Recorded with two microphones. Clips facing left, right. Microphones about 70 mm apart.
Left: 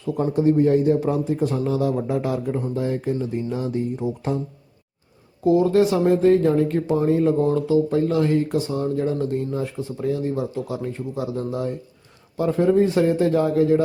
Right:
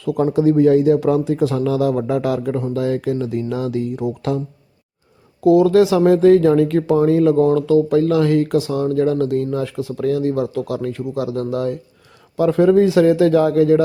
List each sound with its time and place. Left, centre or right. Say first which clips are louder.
0.0 s speech: right 4 dB; right
5.5 s speech: right 5 dB; right